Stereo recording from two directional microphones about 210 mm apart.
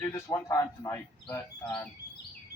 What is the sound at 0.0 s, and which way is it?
Speech, 15° left (ahead or behind).